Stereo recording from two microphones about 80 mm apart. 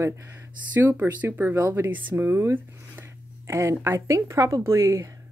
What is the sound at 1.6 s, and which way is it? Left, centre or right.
Speech, right.